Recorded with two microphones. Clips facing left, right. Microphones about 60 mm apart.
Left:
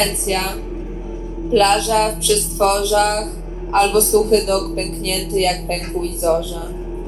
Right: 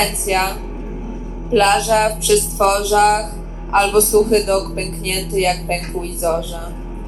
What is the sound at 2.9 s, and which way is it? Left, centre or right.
Speech, right.